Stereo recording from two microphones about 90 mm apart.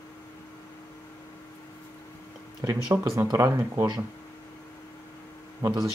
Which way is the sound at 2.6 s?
40° right (ahead or behind).